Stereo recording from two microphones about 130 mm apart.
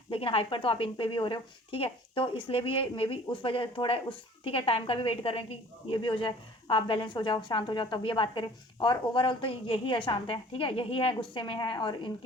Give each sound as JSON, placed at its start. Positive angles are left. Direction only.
{"t": 0.1, "sound": "a woman's voice", "side_deg": 45}